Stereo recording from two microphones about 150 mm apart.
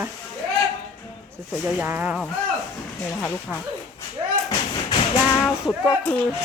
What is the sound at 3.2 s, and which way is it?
Speech, 15° left (ahead or behind).